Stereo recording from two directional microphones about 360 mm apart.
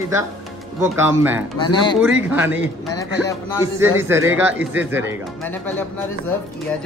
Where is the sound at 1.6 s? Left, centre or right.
Centre.